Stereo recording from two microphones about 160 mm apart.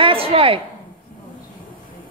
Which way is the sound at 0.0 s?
35° right (ahead or behind).